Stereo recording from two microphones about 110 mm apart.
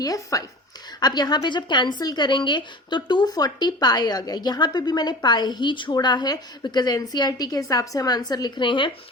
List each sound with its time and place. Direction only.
0.0 s a woman's voice: 30° left (ahead or behind); by 8.9 s 50° left (ahead or behind)